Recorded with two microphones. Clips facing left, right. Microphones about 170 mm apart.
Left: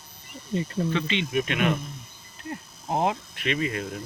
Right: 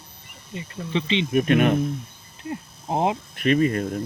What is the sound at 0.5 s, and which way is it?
Speech, 35° left (ahead or behind).